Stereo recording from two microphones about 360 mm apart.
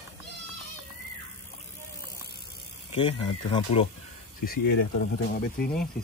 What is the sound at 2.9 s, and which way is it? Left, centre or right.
Speech, centre.